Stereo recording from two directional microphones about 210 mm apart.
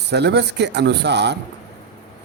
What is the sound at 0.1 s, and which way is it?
Speech, 55° right (ahead or behind).